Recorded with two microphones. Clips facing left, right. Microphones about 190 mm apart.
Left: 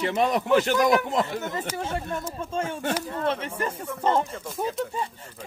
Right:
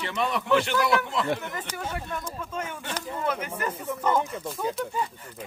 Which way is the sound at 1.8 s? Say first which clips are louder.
Left 3 dB; 25° left (ahead or behind).